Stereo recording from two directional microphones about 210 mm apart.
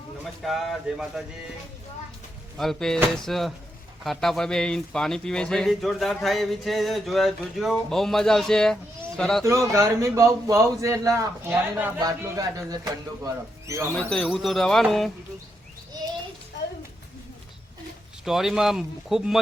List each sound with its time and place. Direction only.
0.4 s a man's voice: centre (ahead or behind)
2.6 s a man's voice: centre (ahead or behind)
9.4 s a man's voice: 15° right (ahead or behind)
13.9 s a man's voice: 5° left (ahead or behind)
18.3 s a man's voice: centre (ahead or behind)